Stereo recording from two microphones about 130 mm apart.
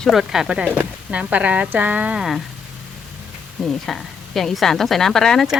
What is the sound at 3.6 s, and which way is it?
Speech, centre (ahead or behind).